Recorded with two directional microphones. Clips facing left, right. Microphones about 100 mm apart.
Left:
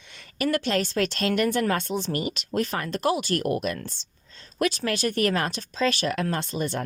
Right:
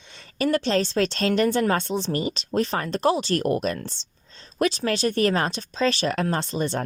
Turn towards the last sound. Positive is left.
turn(degrees=-30)  # may be behind; listen again after turning